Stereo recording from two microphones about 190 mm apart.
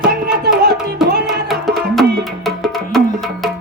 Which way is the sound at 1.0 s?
Centre (ahead or behind).